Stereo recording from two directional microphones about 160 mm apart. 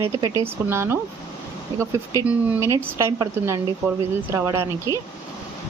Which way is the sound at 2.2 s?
20° right (ahead or behind).